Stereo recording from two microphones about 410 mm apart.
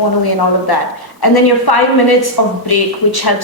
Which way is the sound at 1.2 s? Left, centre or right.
Left.